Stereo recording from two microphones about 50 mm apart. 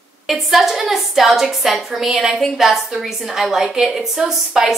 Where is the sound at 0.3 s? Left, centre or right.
Centre.